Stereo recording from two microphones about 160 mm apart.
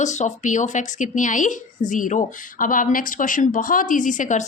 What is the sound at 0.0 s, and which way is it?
Speech, 45° left (ahead or behind).